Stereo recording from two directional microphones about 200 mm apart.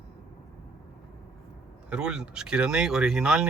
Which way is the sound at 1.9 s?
5° right (ahead or behind).